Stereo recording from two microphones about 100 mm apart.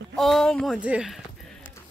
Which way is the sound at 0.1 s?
5° left (ahead or behind).